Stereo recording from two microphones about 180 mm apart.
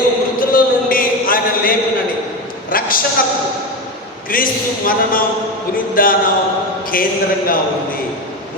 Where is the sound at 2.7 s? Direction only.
50° left (ahead or behind).